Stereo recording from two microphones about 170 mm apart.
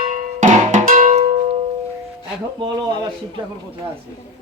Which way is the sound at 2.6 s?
25° right (ahead or behind).